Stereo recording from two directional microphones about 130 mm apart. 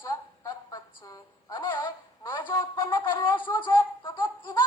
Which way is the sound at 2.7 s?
35° left (ahead or behind).